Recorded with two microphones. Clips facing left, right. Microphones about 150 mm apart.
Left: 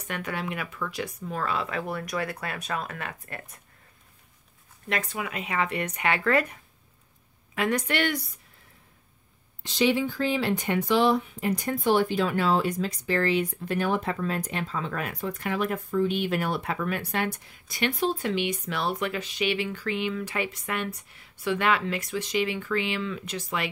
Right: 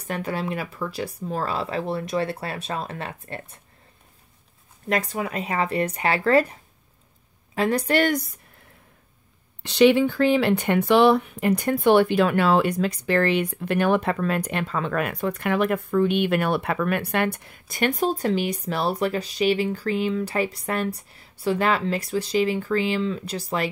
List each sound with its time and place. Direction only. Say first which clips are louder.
0.0 s speech: right 5 dB; 30° right (ahead or behind)
4.8 s speech: right 6 dB; 40° right (ahead or behind)
9.6 s speech: right 8 dB; 65° right (ahead or behind); by 23.7 s 35° right (ahead or behind)